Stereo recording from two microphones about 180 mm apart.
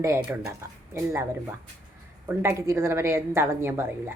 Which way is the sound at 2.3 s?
15° right (ahead or behind).